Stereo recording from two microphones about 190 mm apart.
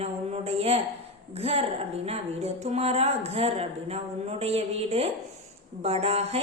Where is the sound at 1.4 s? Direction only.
30° right (ahead or behind).